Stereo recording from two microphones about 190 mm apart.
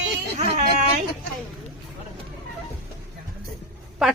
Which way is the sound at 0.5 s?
40° right (ahead or behind).